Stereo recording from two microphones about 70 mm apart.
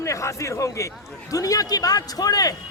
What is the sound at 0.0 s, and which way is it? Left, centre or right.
A man's voice, left.